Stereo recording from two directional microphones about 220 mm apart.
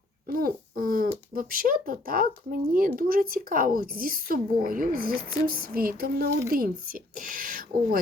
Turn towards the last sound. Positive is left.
turn(degrees=-40)  # may be behind; listen again after turning